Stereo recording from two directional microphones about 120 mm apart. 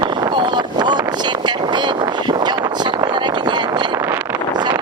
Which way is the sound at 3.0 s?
35° right (ahead or behind).